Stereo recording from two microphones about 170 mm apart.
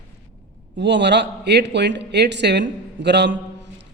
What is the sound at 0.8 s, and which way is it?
A man's voice, 90° right.